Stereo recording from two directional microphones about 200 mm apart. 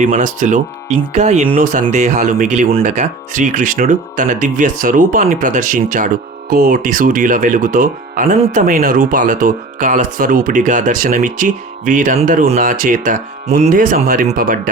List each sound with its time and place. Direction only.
0.0 s speech: 40° right (ahead or behind)